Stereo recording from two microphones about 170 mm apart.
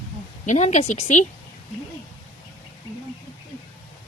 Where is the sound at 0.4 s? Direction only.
40° left (ahead or behind).